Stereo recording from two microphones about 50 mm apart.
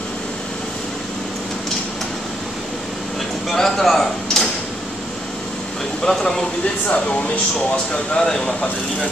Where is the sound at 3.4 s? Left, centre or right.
Centre.